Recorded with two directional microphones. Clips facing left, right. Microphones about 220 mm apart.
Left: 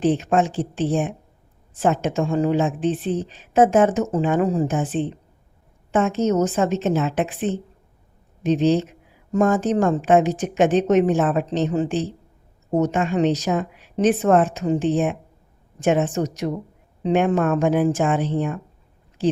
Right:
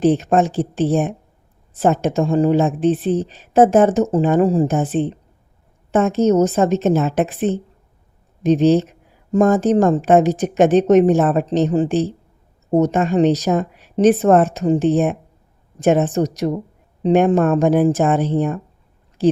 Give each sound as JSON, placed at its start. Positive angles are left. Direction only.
{"t": 0.0, "sound": "a woman's voice", "side_deg": -40}